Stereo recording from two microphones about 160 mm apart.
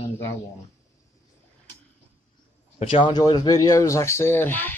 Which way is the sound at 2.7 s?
35° left (ahead or behind).